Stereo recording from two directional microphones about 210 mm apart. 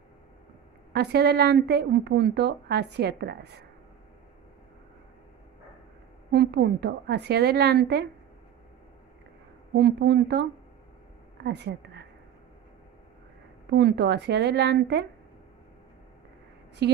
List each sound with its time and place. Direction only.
0.9 s a woman's voice: 50° right (ahead or behind)
6.3 s a woman's voice: 50° right (ahead or behind)
9.8 s a woman's voice: 50° right (ahead or behind)
13.7 s a woman's voice: 55° right (ahead or behind)
16.8 s a woman's voice: 50° right (ahead or behind)